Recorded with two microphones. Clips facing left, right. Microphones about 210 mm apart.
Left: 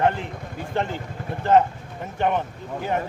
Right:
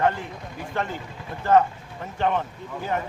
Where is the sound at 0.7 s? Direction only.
25° left (ahead or behind).